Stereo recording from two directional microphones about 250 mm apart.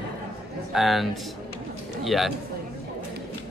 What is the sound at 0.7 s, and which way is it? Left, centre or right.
A woman's voice, centre.